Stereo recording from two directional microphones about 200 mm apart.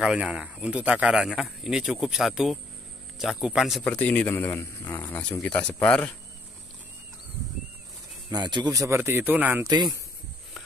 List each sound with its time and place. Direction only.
0.0 s a man's voice: 5° right (ahead or behind)
8.3 s speech: 20° right (ahead or behind)